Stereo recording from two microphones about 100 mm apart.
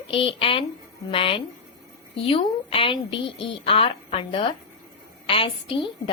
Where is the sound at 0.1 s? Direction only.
70° left (ahead or behind).